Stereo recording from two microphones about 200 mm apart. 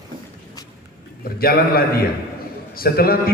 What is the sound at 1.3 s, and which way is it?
A man's voice, 50° left (ahead or behind).